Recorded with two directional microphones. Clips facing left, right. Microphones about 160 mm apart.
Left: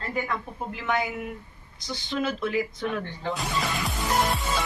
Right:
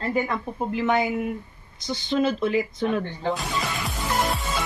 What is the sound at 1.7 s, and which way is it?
Speech, 25° right (ahead or behind).